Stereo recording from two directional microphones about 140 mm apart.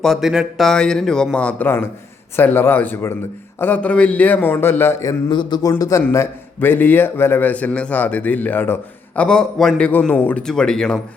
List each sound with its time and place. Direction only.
0.0 s a man's voice: centre (ahead or behind); by 5.1 s 15° left (ahead or behind)
5.3 s speech: 30° left (ahead or behind)
6.0 s a man's voice: 15° left (ahead or behind)